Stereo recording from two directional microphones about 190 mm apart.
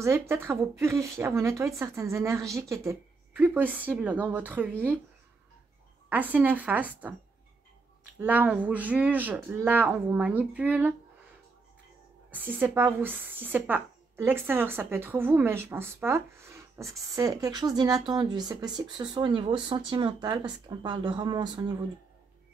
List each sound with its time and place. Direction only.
0.0 s a woman's voice: 15° right (ahead or behind)
6.0 s a woman's voice: 10° right (ahead or behind)
8.2 s a woman's voice: 10° right (ahead or behind)
12.3 s a woman's voice: 10° right (ahead or behind)